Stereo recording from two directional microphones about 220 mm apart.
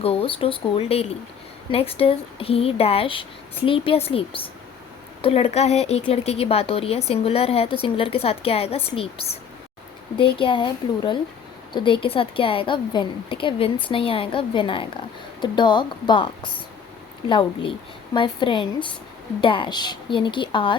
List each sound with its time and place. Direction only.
0.0 s speech: 25° left (ahead or behind)